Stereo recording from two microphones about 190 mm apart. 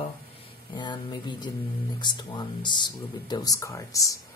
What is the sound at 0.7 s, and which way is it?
Speech, 25° left (ahead or behind).